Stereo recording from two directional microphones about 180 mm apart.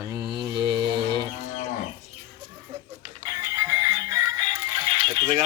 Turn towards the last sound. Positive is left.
turn(degrees=-30)  # may be behind; listen again after turning